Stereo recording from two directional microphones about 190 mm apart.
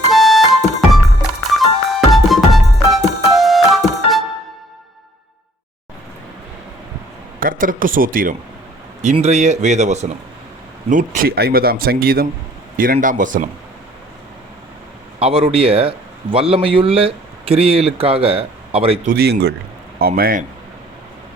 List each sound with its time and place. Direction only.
0.1 s music: centre (ahead or behind)
7.3 s a man's voice: 45° right (ahead or behind)
9.0 s a man's voice: 35° right (ahead or behind)
15.2 s a man's voice: 30° right (ahead or behind)
19.0 s speech: 55° right (ahead or behind)